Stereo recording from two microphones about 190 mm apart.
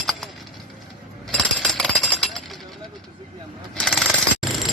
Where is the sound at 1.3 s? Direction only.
Centre (ahead or behind).